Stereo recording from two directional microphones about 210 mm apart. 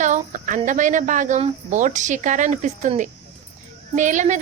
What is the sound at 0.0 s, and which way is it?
A woman's voice, 35° right (ahead or behind).